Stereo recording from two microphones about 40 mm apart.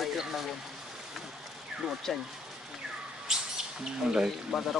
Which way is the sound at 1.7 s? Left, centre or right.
Centre.